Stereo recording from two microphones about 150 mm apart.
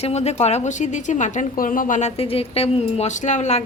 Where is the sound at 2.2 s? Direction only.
40° left (ahead or behind).